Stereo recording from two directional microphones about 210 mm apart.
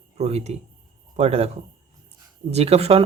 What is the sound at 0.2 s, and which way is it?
A man's voice, 30° right (ahead or behind).